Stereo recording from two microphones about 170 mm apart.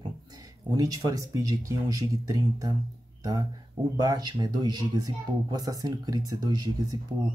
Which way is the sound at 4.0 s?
20° right (ahead or behind).